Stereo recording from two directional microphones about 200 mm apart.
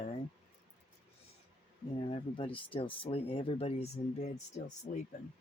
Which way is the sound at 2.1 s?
25° left (ahead or behind).